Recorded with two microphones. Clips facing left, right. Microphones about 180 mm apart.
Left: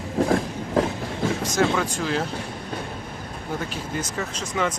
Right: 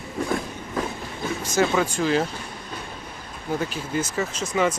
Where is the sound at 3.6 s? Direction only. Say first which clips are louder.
Right 4 dB; 5° right (ahead or behind).